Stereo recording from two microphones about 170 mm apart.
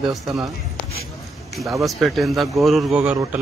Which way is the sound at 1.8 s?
Centre (ahead or behind).